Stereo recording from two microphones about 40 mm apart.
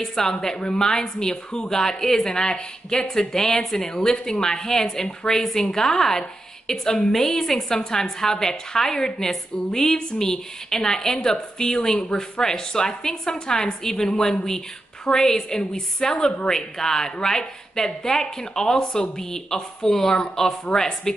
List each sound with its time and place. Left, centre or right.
0.0 s a woman's voice: centre